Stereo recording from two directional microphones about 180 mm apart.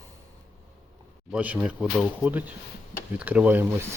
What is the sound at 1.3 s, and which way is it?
Speech, 10° right (ahead or behind).